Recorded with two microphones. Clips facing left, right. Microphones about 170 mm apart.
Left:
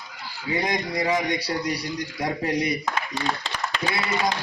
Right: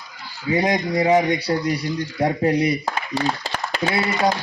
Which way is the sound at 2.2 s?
30° right (ahead or behind).